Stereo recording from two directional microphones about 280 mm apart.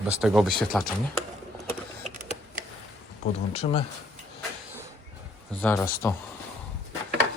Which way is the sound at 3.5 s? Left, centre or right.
Left.